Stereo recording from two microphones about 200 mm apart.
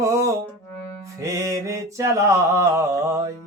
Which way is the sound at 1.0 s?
15° right (ahead or behind).